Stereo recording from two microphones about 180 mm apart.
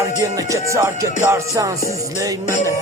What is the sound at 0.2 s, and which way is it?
Music, 20° right (ahead or behind).